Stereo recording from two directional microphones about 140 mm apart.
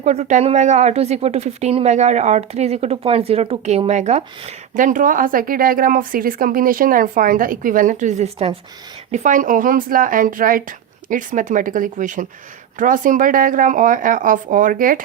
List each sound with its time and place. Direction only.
0.0 s speech: 55° right (ahead or behind)
4.7 s speech: 65° right (ahead or behind); by 8.5 s 50° right (ahead or behind)
9.1 s speech: 65° right (ahead or behind)